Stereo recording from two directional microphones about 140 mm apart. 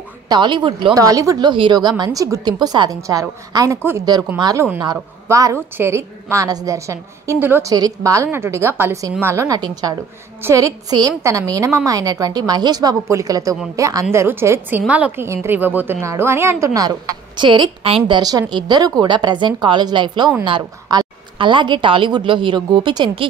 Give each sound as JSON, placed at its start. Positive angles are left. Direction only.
{"t": 0.3, "sound": "a woman's voice", "side_deg": -35}
{"t": 0.9, "sound": "a woman's voice", "side_deg": -25}
{"t": 7.7, "sound": "a woman's voice", "side_deg": -25}